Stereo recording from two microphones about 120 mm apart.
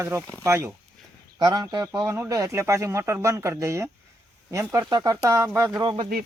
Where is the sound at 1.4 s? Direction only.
35° right (ahead or behind).